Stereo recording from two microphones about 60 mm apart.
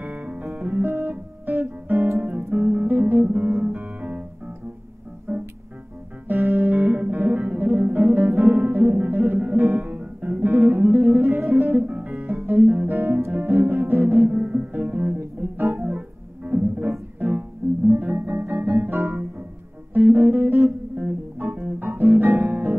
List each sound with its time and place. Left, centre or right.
0.0 s music: right
2.3 s guitar: right
5.3 s music: right
11.9 s guitar: right
12.6 s music: right
14.3 s music: right